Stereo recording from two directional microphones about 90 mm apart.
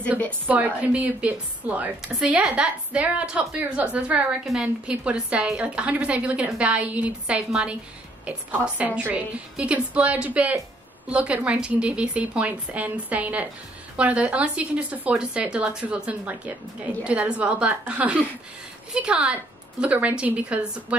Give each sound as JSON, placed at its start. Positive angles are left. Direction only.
{"t": 0.5, "sound": "a woman's voice", "side_deg": -15}
{"t": 2.1, "sound": "a woman's voice", "side_deg": -5}